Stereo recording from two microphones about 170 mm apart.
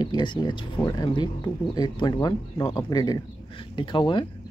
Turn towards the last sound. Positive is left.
turn(degrees=30)  # may be behind; listen again after turning